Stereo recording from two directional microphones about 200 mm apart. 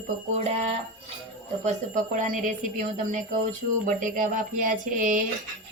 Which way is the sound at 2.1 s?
40° right (ahead or behind).